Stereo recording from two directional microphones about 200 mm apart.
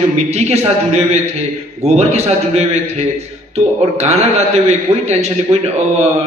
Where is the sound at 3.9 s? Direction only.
35° right (ahead or behind).